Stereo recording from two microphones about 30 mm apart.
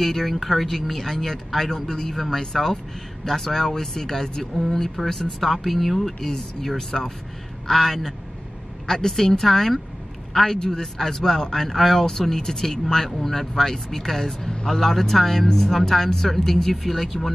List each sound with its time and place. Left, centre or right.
0.0 s speech: centre
1.1 s speech: centre
7.6 s speech: centre
14.7 s speech: centre
16.7 s speech: centre